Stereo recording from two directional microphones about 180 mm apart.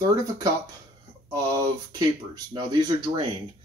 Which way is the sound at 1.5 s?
20° right (ahead or behind).